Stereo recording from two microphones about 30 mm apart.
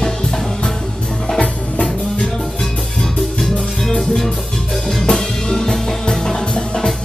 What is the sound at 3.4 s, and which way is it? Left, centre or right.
Music, centre.